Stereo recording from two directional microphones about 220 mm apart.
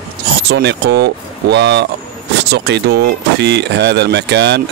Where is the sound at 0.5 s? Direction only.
50° right (ahead or behind).